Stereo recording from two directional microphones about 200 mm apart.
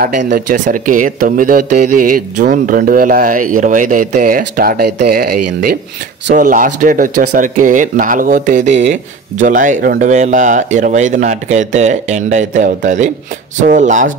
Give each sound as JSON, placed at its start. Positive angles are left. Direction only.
{"t": 0.0, "sound": "speech", "side_deg": -50}